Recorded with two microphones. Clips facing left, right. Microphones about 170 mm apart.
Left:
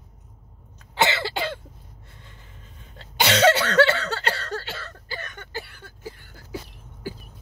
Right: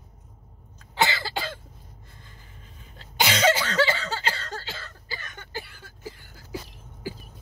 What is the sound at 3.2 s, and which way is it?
Cough, 70° left (ahead or behind).